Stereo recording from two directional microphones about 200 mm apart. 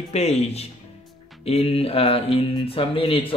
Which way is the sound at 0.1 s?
30° left (ahead or behind).